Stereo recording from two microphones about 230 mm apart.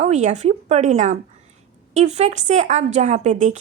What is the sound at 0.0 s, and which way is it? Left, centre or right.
Speech, right.